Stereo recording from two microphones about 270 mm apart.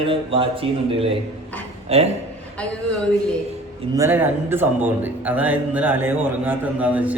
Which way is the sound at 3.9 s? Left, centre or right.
Centre.